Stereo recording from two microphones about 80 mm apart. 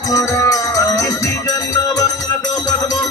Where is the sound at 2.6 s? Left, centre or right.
Left.